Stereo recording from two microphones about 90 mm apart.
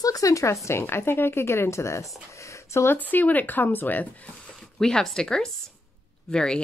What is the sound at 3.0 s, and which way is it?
Speech, 20° left (ahead or behind).